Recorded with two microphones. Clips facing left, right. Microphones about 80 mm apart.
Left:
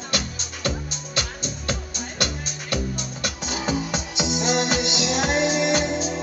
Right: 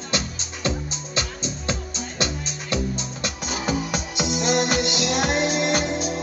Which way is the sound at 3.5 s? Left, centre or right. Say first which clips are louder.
Even; right.